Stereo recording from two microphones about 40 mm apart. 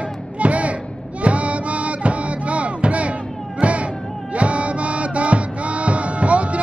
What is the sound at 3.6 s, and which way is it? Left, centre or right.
Music, right.